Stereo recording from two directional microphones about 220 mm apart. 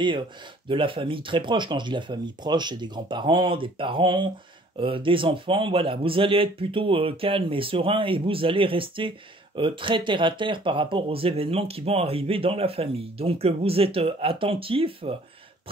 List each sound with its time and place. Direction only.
0.7 s speech: 25° right (ahead or behind)